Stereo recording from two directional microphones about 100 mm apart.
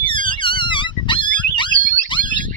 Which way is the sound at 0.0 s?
55° left (ahead or behind).